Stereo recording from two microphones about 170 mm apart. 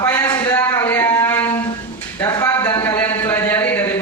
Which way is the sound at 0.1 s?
20° left (ahead or behind).